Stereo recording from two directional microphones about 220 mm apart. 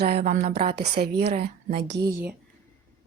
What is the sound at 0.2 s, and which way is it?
Speech, 35° right (ahead or behind).